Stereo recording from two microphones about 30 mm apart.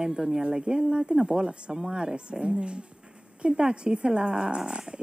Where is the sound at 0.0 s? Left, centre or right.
Right.